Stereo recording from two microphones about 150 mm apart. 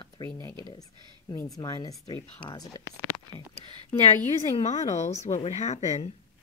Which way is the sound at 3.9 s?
45° left (ahead or behind).